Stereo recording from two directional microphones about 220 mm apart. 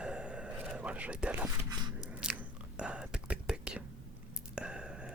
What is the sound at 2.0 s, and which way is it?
Whispering, 5° right (ahead or behind).